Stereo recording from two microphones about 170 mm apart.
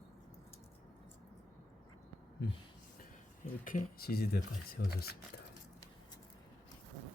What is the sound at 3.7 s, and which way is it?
Speech, 65° left (ahead or behind).